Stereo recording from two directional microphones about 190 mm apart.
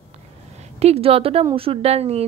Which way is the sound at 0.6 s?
35° right (ahead or behind).